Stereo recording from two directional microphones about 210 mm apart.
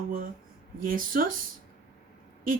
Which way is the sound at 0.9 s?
40° right (ahead or behind).